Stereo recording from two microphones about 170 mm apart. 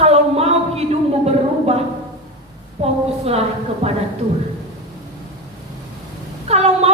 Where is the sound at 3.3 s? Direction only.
35° right (ahead or behind).